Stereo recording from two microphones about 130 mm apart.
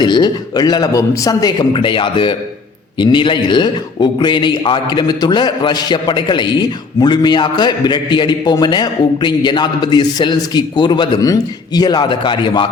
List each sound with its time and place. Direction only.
0.0 s a man's voice: 35° left (ahead or behind)